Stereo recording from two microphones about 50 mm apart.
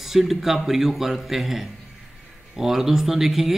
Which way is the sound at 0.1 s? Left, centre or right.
Centre.